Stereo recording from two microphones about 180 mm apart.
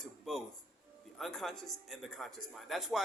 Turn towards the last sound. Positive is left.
turn(degrees=0)  # may be behind; listen again after turning